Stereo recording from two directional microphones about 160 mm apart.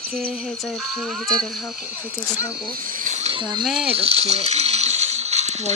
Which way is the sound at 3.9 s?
40° right (ahead or behind).